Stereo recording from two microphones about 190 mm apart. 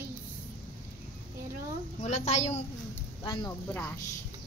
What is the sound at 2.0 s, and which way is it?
Speech, 35° left (ahead or behind).